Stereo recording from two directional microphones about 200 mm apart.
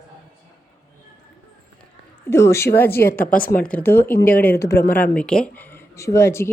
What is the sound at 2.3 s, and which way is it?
A woman's voice, 15° left (ahead or behind).